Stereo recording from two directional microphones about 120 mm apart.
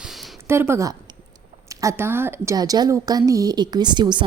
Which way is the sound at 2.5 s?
35° right (ahead or behind).